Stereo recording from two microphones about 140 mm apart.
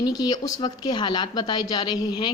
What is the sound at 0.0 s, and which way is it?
A woman's voice, 30° left (ahead or behind).